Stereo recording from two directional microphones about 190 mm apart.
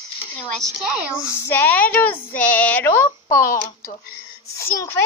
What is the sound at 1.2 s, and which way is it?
Speech, 10° left (ahead or behind).